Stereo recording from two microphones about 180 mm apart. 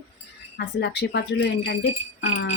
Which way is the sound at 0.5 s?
65° left (ahead or behind).